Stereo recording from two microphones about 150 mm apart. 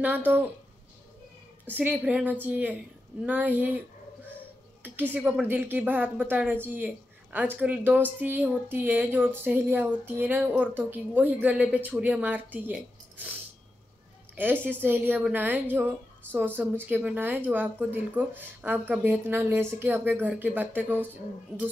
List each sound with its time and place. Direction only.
1.7 s a woman's voice: 10° right (ahead or behind)
5.1 s a woman's voice: 10° right (ahead or behind)
14.3 s a sound: 15° right (ahead or behind)
14.8 s a woman's voice: 10° right (ahead or behind)